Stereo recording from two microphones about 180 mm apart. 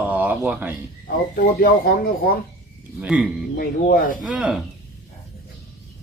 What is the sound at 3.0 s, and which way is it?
Speech, 5° right (ahead or behind).